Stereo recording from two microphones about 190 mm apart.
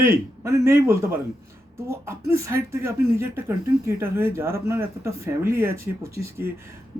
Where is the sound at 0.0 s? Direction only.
15° right (ahead or behind).